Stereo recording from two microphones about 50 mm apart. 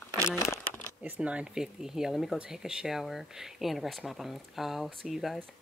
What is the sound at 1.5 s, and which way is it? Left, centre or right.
Speech, centre.